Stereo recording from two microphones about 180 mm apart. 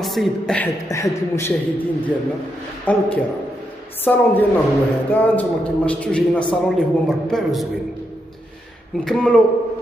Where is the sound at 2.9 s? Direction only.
10° left (ahead or behind).